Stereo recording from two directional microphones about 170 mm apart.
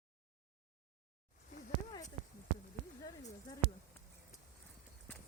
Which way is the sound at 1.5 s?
55° left (ahead or behind).